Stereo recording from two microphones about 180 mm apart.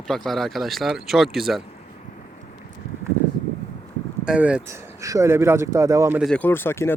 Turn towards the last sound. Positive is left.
turn(degrees=15)  # may be behind; listen again after turning